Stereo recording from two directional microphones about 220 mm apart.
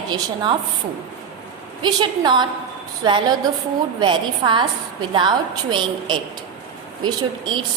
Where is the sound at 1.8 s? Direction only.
20° right (ahead or behind).